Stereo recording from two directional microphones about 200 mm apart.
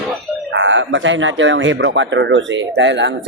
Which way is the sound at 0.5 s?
70° right (ahead or behind).